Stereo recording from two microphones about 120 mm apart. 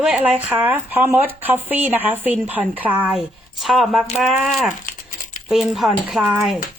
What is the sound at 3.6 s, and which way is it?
Speech, centre (ahead or behind).